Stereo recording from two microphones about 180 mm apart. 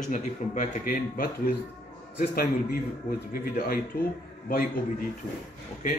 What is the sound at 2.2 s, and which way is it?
A man's voice, 55° left (ahead or behind).